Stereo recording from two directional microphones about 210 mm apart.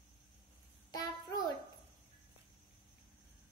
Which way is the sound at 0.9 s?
20° left (ahead or behind).